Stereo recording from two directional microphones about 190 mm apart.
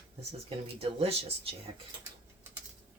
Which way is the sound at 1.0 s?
30° right (ahead or behind).